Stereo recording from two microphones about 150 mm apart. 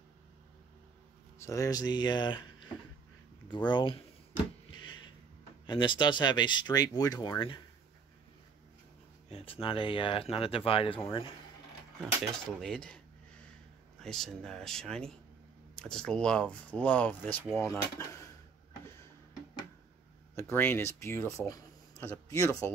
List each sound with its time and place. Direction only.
1.4 s speech: 20° left (ahead or behind)
5.7 s speech: 30° left (ahead or behind)
9.3 s speech: 40° left (ahead or behind)
12.0 s speech: 5° left (ahead or behind)
14.0 s speech: 5° left (ahead or behind)
20.3 s speech: 15° left (ahead or behind)